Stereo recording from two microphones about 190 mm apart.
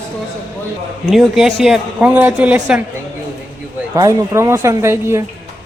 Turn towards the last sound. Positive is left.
turn(degrees=-15)  # may be behind; listen again after turning